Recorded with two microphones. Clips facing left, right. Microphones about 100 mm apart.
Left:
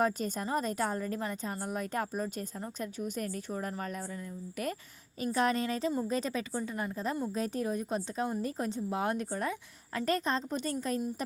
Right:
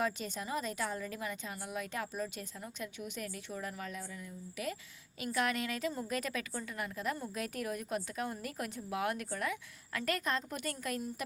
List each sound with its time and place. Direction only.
0.0 s a woman's voice: 45° left (ahead or behind)
5.2 s a woman's voice: 35° left (ahead or behind)